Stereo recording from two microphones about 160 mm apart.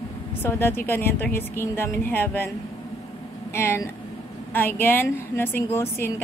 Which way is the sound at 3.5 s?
15° left (ahead or behind).